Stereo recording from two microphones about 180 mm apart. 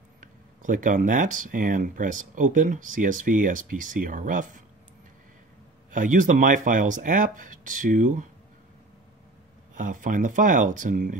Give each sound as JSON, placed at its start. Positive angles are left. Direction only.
{"t": 0.2, "sound": "speech", "side_deg": -45}
{"t": 5.9, "sound": "speech", "side_deg": -45}
{"t": 9.8, "sound": "speech", "side_deg": -45}